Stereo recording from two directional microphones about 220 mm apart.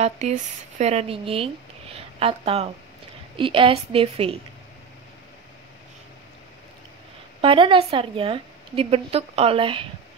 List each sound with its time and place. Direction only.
0.0 s a woman's voice: 35° right (ahead or behind)
7.4 s a woman's voice: 25° right (ahead or behind)